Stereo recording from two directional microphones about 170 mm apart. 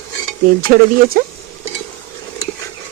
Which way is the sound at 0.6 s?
60° right (ahead or behind).